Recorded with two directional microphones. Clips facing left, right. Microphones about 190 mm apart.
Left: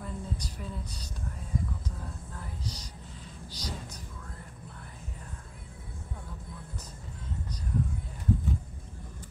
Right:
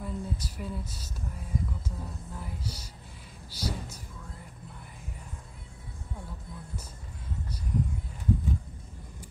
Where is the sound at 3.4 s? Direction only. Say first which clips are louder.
Right 5 dB; 10° right (ahead or behind).